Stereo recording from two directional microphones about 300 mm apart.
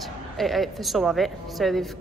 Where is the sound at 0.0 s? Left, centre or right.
Centre.